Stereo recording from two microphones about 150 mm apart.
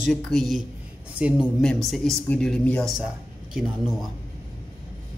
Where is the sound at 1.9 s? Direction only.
5° left (ahead or behind).